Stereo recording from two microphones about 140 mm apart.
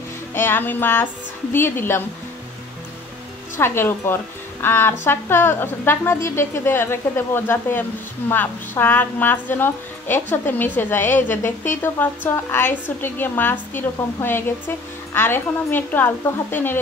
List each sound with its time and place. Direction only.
0.3 s a woman's voice: 15° left (ahead or behind)
3.5 s a woman's voice: 15° left (ahead or behind)